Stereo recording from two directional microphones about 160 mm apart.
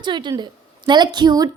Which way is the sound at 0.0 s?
30° right (ahead or behind).